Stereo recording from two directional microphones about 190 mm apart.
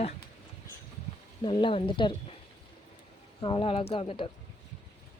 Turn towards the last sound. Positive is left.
turn(degrees=30)  # may be behind; listen again after turning